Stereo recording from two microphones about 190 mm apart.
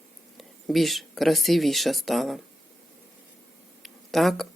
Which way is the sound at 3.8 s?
Centre (ahead or behind).